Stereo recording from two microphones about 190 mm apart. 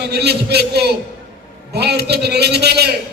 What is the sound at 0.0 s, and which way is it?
A man's voice, 60° right (ahead or behind).